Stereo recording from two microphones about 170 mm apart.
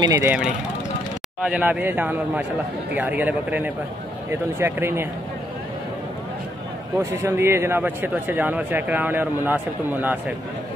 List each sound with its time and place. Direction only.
0.0 s speech: 25° right (ahead or behind)
1.4 s speech: 10° right (ahead or behind)
7.0 s speech: 15° right (ahead or behind)